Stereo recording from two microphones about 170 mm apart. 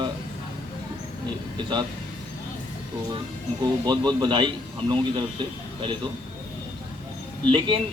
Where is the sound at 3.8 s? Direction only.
25° right (ahead or behind).